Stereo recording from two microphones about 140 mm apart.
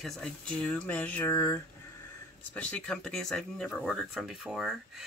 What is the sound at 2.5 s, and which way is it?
A woman's voice, 10° left (ahead or behind).